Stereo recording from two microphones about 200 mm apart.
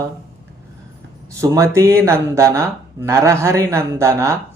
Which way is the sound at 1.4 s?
15° right (ahead or behind).